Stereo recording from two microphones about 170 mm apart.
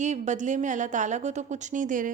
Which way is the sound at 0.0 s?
45° right (ahead or behind).